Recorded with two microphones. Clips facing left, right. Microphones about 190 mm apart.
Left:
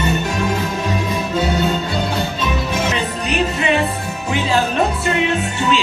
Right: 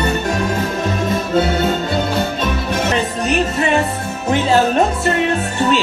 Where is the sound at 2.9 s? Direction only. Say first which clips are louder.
Right 3 dB; 45° right (ahead or behind).